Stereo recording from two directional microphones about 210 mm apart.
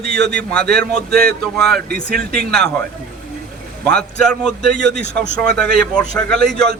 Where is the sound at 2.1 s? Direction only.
45° right (ahead or behind).